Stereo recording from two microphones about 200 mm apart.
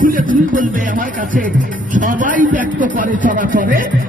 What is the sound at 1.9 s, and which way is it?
A man's voice, 40° right (ahead or behind).